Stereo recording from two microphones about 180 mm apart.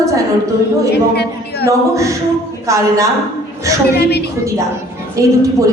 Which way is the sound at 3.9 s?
65° left (ahead or behind).